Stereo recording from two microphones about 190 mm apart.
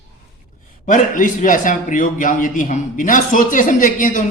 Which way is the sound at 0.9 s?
45° left (ahead or behind).